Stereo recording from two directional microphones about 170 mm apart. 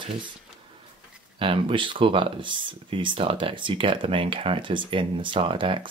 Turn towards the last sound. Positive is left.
turn(degrees=-30)  # may be behind; listen again after turning